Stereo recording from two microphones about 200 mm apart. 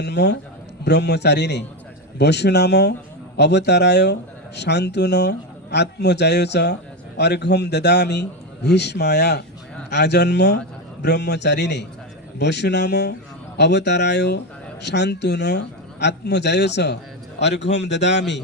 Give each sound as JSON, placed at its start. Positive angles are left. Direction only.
{"t": 0.0, "sound": "speech", "side_deg": 60}